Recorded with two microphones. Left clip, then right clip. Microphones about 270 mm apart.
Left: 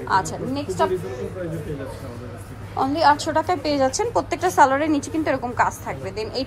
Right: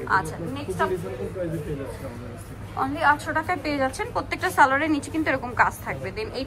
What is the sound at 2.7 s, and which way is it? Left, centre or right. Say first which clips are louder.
A woman's voice: left 4 dB; centre.